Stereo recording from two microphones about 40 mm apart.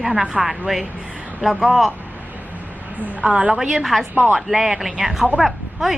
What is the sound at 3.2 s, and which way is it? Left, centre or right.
Speech, right.